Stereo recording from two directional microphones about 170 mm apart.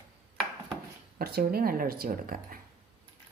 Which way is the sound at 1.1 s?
60° right (ahead or behind).